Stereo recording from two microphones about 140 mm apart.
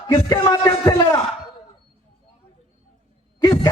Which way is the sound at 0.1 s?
30° left (ahead or behind).